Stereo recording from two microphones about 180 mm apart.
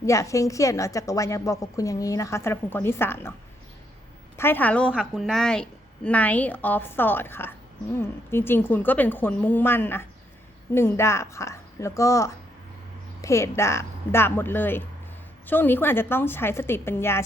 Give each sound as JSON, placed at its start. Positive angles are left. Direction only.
{"t": 0.0, "sound": "a woman's voice", "side_deg": 15}
{"t": 4.4, "sound": "a woman's voice", "side_deg": 10}
{"t": 4.9, "sound": "a woman's voice", "side_deg": -5}